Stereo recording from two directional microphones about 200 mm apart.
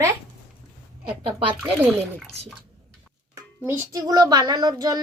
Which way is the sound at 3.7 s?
15° right (ahead or behind).